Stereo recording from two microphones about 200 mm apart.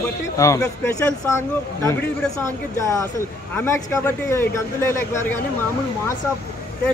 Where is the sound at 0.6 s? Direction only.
10° left (ahead or behind).